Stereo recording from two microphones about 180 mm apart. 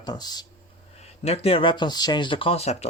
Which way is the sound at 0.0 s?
20° left (ahead or behind).